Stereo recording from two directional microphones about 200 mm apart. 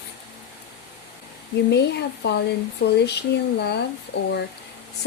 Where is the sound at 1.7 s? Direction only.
55° left (ahead or behind).